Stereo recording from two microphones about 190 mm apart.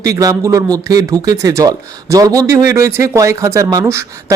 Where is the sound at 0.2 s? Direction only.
15° right (ahead or behind).